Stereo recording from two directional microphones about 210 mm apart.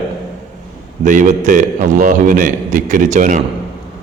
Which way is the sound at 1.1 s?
35° right (ahead or behind).